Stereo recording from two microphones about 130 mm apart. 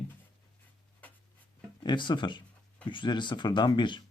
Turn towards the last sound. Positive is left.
turn(degrees=40)  # may be behind; listen again after turning